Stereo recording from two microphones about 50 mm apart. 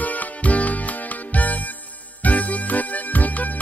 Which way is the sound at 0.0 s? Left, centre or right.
Left.